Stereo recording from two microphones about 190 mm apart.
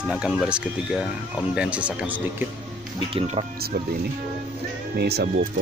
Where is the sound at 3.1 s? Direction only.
30° right (ahead or behind).